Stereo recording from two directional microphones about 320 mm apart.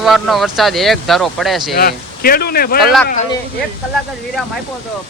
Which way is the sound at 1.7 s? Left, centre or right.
Left.